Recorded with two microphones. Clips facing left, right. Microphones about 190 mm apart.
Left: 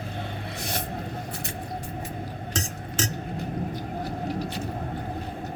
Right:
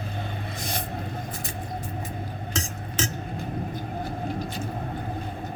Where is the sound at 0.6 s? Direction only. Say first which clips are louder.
Left 1 dB; 65° left (ahead or behind).